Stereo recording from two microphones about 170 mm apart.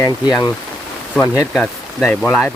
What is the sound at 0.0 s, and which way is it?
Speech, 25° left (ahead or behind).